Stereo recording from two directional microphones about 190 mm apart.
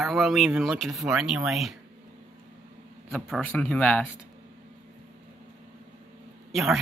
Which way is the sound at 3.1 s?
5° left (ahead or behind).